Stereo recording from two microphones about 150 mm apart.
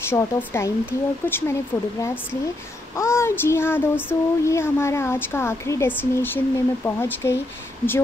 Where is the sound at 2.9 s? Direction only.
20° left (ahead or behind).